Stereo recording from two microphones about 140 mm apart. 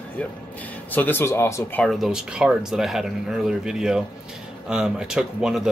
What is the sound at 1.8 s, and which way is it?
Speech, centre (ahead or behind).